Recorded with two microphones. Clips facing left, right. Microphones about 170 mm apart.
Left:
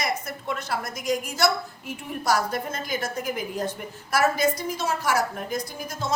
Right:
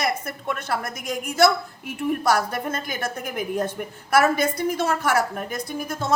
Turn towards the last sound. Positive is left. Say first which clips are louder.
# right 4 dB
turn(degrees=-55)  # may be behind; listen again after turning